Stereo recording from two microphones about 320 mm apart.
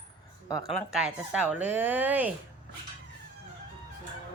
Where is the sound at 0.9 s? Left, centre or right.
Centre.